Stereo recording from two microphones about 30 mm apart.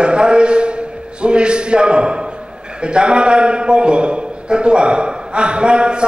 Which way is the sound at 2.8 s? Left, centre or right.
Right.